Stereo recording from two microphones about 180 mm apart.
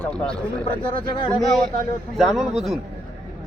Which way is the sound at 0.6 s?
30° left (ahead or behind).